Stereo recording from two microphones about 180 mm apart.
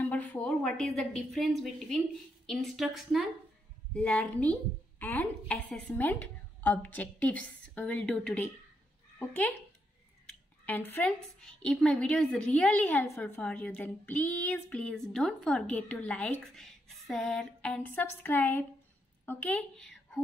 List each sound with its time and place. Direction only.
0.0 s a woman's voice: 10° left (ahead or behind)
10.6 s a woman's voice: 10° left (ahead or behind)